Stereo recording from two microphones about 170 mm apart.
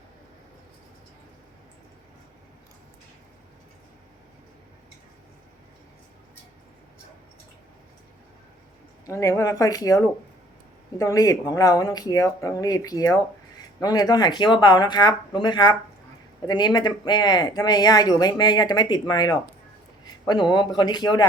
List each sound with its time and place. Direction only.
9.0 s speech: 15° left (ahead or behind)